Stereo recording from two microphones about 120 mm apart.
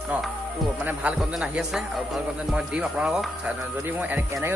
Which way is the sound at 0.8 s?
10° right (ahead or behind).